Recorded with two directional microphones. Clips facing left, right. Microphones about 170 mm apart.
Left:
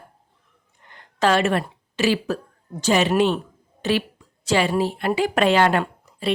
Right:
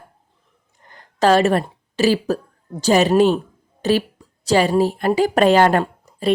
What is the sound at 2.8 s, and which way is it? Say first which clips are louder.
A woman's voice: right 4 dB; 40° right (ahead or behind).